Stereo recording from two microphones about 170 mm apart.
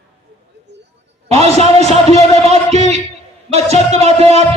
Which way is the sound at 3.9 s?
40° right (ahead or behind).